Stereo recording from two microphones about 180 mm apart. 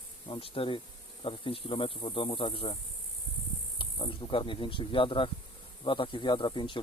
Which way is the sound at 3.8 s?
30° left (ahead or behind).